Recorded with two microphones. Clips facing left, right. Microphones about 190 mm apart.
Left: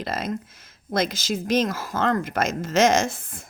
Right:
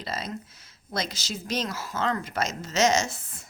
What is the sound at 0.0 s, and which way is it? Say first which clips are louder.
Speech: left 6 dB; 50° left (ahead or behind).